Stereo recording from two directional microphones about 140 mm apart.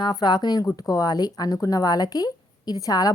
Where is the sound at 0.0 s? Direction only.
30° left (ahead or behind).